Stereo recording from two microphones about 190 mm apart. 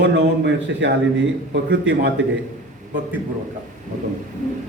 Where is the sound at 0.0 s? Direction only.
70° right (ahead or behind).